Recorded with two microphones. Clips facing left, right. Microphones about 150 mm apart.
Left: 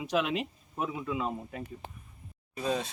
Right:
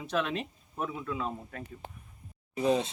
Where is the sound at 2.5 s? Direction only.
20° right (ahead or behind).